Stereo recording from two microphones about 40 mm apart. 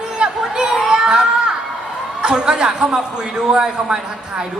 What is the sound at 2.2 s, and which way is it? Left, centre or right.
A man's voice, right.